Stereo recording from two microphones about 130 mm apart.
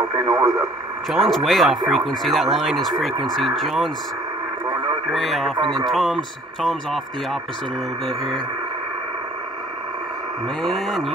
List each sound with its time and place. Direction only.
0.2 s radio: 30° right (ahead or behind)
1.1 s speech: centre (ahead or behind)
5.1 s speech: centre (ahead or behind)
10.6 s speech: centre (ahead or behind)